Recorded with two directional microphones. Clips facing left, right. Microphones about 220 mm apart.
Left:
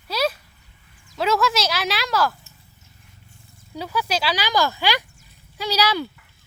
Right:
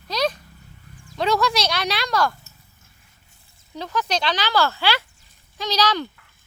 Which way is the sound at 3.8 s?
10° left (ahead or behind).